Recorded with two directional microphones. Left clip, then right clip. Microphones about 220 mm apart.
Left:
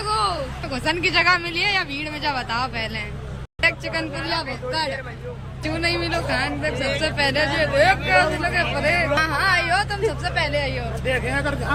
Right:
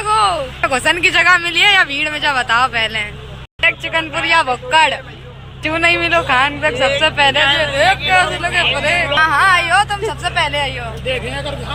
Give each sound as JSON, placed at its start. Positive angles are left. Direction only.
{"t": 0.0, "sound": "speech", "side_deg": 5}
{"t": 4.1, "sound": "a man's voice", "side_deg": -20}
{"t": 5.6, "sound": "a woman's voice", "side_deg": 5}